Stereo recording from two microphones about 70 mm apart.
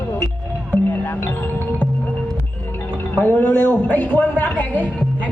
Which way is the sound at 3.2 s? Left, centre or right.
Left.